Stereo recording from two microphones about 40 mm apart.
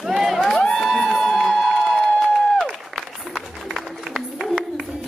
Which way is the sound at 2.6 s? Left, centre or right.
Centre.